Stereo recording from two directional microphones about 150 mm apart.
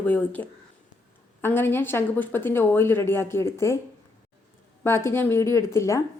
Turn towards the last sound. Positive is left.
turn(degrees=20)  # may be behind; listen again after turning